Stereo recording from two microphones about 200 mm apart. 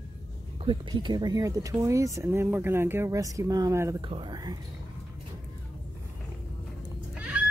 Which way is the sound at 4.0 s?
25° right (ahead or behind).